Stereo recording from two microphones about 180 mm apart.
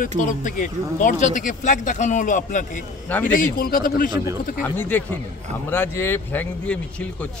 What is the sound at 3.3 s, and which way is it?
Speech, 50° left (ahead or behind).